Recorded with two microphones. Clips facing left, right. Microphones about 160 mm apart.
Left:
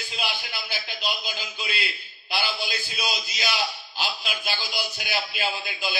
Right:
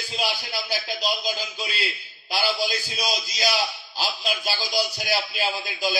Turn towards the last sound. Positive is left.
turn(degrees=-40)  # may be behind; listen again after turning